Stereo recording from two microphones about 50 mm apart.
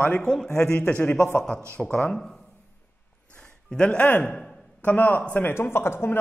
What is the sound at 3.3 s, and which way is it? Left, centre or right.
Music, centre.